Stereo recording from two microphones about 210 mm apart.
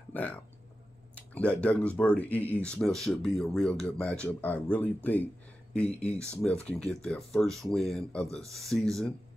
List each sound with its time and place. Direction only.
0.1 s speech: 5° left (ahead or behind)